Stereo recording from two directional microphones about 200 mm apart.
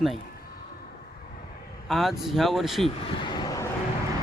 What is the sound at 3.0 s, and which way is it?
Vehicle, 25° left (ahead or behind).